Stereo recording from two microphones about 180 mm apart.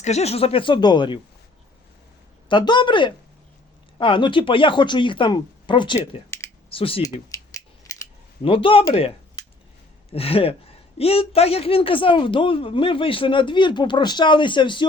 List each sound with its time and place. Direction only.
0.0 s a man's voice: 35° left (ahead or behind)
2.5 s a man's voice: 25° left (ahead or behind)
6.0 s speech: 15° left (ahead or behind)
6.7 s a man's voice: 30° left (ahead or behind)
7.9 s scissors: 20° left (ahead or behind)
8.4 s a man's voice: 30° left (ahead or behind)